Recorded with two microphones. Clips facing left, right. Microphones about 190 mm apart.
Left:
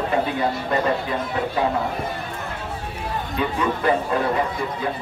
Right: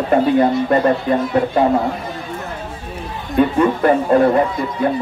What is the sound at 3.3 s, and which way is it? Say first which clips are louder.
A man's voice: right 10 dB; 55° right (ahead or behind).